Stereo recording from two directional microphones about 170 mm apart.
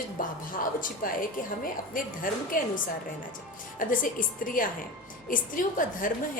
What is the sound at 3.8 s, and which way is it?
A woman's voice, 55° left (ahead or behind).